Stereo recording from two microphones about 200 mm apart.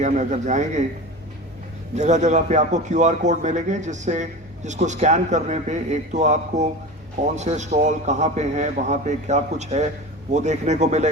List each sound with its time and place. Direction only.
0.0 s speech: 35° right (ahead or behind)
2.0 s speech: 35° right (ahead or behind)